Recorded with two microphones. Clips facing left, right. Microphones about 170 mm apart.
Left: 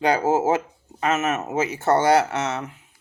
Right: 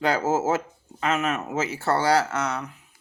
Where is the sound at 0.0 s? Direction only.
20° left (ahead or behind).